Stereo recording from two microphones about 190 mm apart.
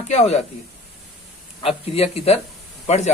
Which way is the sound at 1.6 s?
30° left (ahead or behind).